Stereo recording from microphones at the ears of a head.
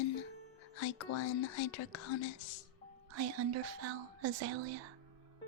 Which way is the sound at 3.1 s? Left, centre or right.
Right.